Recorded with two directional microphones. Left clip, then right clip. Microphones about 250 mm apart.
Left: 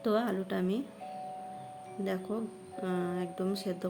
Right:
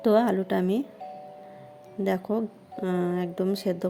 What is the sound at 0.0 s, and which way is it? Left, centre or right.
Speech, right.